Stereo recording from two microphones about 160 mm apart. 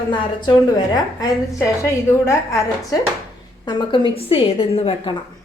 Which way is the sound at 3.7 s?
30° left (ahead or behind).